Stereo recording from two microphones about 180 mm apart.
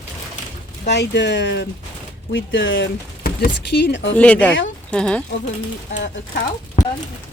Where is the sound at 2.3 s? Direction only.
90° left.